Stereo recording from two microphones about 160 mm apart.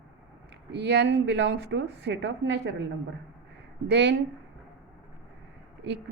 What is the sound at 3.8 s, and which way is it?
Speech, 90° right.